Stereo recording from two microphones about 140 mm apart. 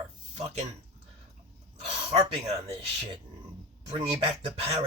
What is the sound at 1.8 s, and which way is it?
Speech, 45° right (ahead or behind).